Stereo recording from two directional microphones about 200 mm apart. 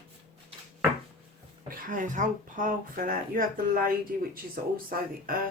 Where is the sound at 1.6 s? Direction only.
45° right (ahead or behind).